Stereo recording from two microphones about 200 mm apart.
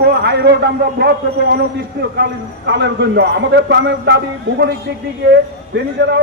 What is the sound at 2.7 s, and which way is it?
A man's voice, 55° right (ahead or behind).